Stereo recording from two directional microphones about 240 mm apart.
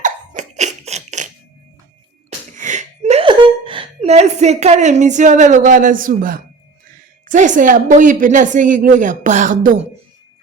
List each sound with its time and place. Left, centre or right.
0.0 s laughter: right
2.6 s a sound: right
7.3 s a woman's voice: right